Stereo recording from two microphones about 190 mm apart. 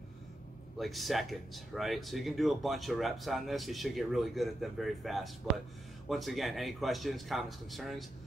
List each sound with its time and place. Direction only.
0.7 s speech: centre (ahead or behind)